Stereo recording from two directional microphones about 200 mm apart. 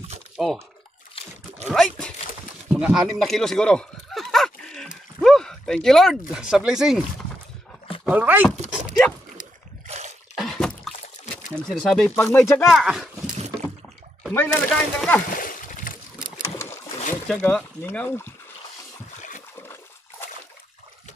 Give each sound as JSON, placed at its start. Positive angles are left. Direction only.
{"t": 0.4, "sound": "speech", "side_deg": 0}
{"t": 1.2, "sound": "a sound", "side_deg": 30}
{"t": 1.7, "sound": "speech", "side_deg": 5}
{"t": 2.7, "sound": "a sound", "side_deg": 0}
{"t": 8.1, "sound": "speech", "side_deg": -10}
{"t": 9.8, "sound": "a sound", "side_deg": -35}
{"t": 10.3, "sound": "drip", "side_deg": 0}
{"t": 11.6, "sound": "speech", "side_deg": 0}
{"t": 12.6, "sound": "speech", "side_deg": 0}
{"t": 14.3, "sound": "speech", "side_deg": 5}
{"t": 15.3, "sound": "splash", "side_deg": 45}
{"t": 17.1, "sound": "speech", "side_deg": 5}
{"t": 19.6, "sound": "a sound", "side_deg": 10}